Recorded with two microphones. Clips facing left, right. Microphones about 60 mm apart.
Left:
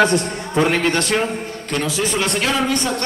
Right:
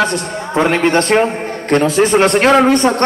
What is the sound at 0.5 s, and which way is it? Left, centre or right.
A man's voice, right.